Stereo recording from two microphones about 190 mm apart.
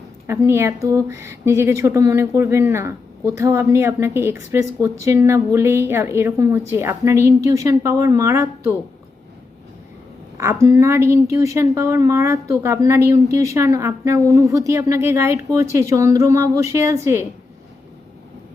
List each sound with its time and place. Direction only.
0.3 s speech: 15° right (ahead or behind)
10.3 s speech: 15° right (ahead or behind)